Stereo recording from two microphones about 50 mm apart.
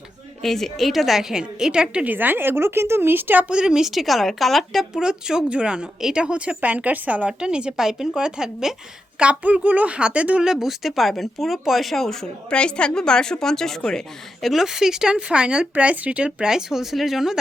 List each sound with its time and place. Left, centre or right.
0.4 s speech: centre
2.0 s speech: right
3.5 s speech: centre
4.9 s speech: centre
6.0 s speech: centre
6.2 s speech: right
7.3 s speech: centre
10.4 s a woman's voice: centre
14.4 s speech: centre
15.7 s speech: right; by 17.4 s centre